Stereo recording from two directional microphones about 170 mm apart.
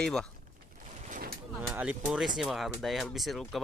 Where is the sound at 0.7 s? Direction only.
50° right (ahead or behind).